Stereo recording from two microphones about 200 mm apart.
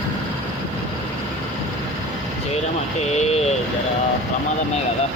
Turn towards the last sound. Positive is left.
turn(degrees=30)  # may be behind; listen again after turning